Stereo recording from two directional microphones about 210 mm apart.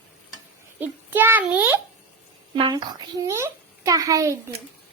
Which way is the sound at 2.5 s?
20° right (ahead or behind).